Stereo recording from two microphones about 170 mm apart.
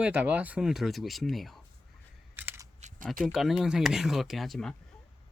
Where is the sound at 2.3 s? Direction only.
10° right (ahead or behind).